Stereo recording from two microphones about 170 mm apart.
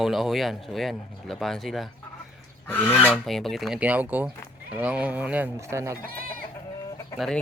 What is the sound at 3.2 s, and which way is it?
Speech, centre (ahead or behind).